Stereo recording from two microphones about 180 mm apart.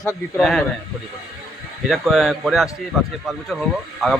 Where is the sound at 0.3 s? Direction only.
Centre (ahead or behind).